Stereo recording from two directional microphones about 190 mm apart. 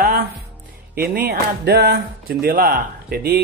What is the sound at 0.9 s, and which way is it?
Speech, 55° right (ahead or behind).